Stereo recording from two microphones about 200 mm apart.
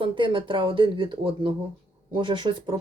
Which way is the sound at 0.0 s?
25° right (ahead or behind).